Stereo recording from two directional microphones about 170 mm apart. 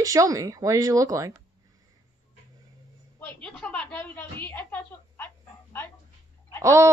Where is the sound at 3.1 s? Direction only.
5° left (ahead or behind).